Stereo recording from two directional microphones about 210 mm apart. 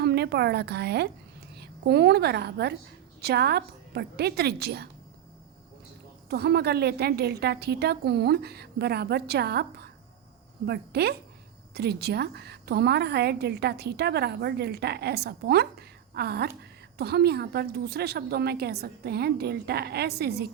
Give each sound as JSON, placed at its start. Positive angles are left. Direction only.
{"t": 0.0, "sound": "a woman's voice", "side_deg": -50}
{"t": 6.3, "sound": "a woman's voice", "side_deg": -50}